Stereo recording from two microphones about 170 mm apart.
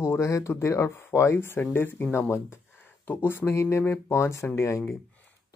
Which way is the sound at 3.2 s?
15° left (ahead or behind).